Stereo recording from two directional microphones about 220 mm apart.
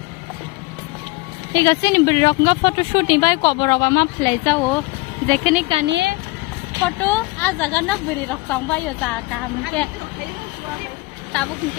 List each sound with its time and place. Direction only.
1.5 s speech: 15° left (ahead or behind)
5.9 s speech: 50° right (ahead or behind)
6.8 s speech: 10° left (ahead or behind)